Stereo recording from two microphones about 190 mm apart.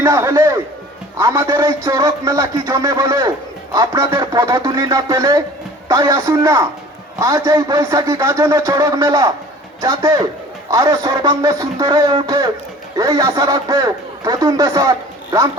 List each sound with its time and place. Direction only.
0.0 s a man's voice: 15° right (ahead or behind)